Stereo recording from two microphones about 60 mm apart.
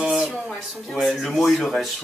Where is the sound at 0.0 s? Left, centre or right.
Centre.